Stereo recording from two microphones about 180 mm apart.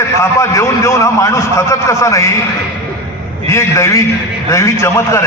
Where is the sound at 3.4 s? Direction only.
15° left (ahead or behind).